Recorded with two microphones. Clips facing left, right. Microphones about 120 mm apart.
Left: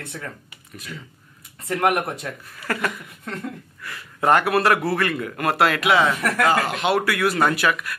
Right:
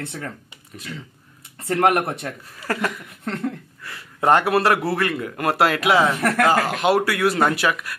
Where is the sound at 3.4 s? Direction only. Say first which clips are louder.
Right 5 dB; 25° right (ahead or behind).